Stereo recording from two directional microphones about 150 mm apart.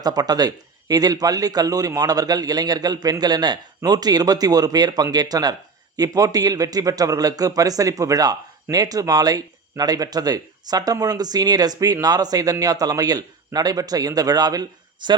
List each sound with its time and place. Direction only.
0.0 s a man's voice: 25° right (ahead or behind)